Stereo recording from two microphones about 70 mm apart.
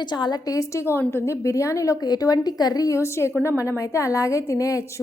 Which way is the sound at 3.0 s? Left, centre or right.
Left.